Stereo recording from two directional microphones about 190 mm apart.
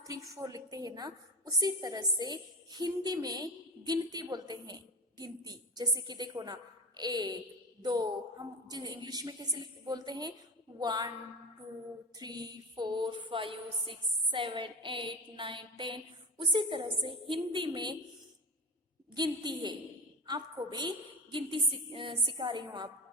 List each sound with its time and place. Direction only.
0.0 s a woman's voice: 15° right (ahead or behind)
12.2 s a woman's voice: 20° right (ahead or behind)
19.1 s a woman's voice: 20° right (ahead or behind)